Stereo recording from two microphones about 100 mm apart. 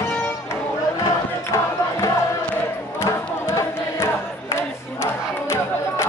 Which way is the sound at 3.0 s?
30° left (ahead or behind).